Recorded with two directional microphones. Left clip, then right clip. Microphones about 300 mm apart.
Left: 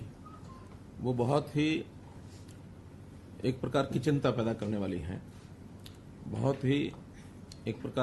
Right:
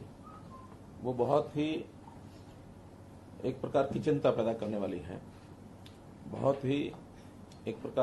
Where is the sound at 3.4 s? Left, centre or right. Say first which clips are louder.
Right 1 dB; left.